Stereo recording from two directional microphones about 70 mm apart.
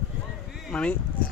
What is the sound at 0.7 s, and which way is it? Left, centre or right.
Speech, centre.